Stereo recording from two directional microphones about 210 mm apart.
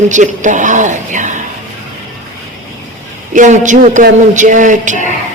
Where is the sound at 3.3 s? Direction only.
35° right (ahead or behind).